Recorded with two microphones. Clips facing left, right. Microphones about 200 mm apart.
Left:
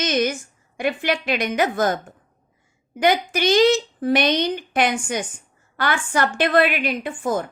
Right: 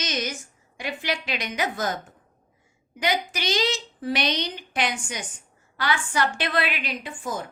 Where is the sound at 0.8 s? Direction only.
55° left (ahead or behind).